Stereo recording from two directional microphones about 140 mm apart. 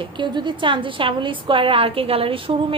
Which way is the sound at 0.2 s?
35° right (ahead or behind).